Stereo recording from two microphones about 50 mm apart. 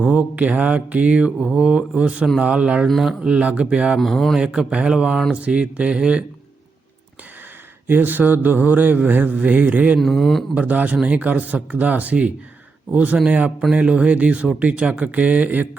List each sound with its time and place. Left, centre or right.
0.0 s mantra: right
3.9 s speech: centre
4.4 s a man's voice: centre
5.3 s mantra: right
7.9 s mantra: right
10.0 s speech: centre
10.5 s mantra: right